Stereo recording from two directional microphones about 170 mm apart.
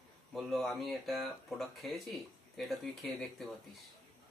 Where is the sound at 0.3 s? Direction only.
Centre (ahead or behind).